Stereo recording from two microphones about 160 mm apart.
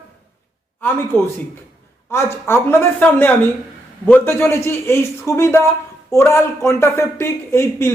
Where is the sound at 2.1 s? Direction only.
15° left (ahead or behind).